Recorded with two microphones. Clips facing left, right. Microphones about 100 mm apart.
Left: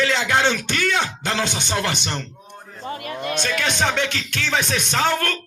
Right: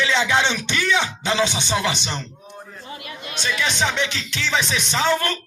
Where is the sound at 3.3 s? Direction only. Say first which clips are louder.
Left 1 dB; 55° left (ahead or behind).